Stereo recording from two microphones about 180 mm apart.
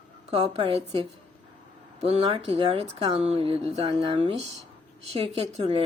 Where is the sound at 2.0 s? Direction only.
35° right (ahead or behind).